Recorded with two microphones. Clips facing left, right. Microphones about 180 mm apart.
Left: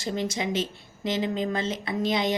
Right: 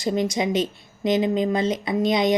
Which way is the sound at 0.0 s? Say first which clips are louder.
Right 6 dB; 15° right (ahead or behind).